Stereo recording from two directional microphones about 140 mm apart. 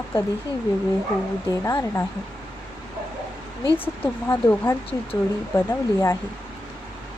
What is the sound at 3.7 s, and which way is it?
Speech, 15° left (ahead or behind).